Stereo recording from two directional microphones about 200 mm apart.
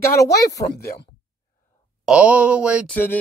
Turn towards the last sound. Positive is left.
turn(degrees=10)  # may be behind; listen again after turning